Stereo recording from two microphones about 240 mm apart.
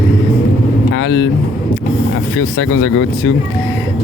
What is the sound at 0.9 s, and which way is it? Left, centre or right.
Speech, left.